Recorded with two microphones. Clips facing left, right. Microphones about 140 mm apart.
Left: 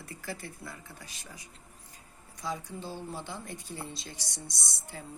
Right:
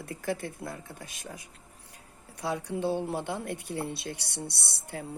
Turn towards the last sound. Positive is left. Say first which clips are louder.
# right 5 dB
turn(degrees=-65)  # may be behind; listen again after turning